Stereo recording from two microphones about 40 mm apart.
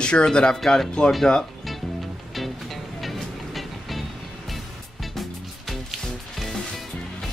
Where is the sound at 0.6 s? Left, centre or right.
Centre.